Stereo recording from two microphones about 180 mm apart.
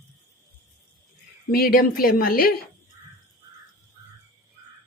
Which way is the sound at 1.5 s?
55° left (ahead or behind).